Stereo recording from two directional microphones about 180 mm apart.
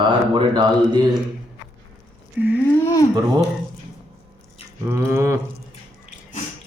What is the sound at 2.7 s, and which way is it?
Speech, 15° left (ahead or behind).